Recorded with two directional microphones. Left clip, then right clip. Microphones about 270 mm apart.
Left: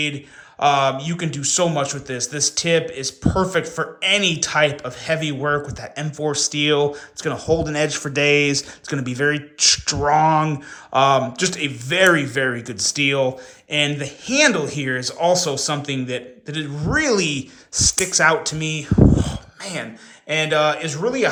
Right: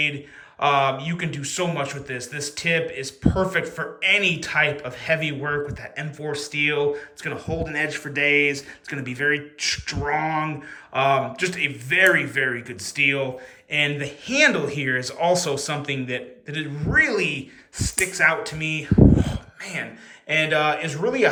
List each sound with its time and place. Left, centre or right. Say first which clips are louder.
0.6 s a man's voice: left 3 dB; centre